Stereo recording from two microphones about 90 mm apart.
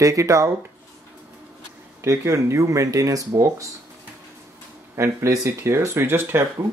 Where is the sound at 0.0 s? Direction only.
35° right (ahead or behind).